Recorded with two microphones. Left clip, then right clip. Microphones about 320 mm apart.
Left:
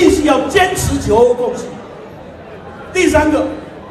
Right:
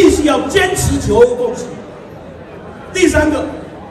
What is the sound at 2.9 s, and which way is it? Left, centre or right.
Speech, centre.